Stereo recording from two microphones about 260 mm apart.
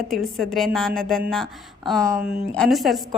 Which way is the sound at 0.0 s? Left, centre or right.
Centre.